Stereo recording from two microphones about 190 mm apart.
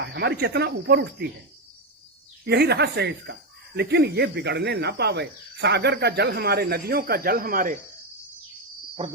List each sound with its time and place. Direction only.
0.0 s speech: 60° right (ahead or behind)
2.4 s speech: 60° right (ahead or behind)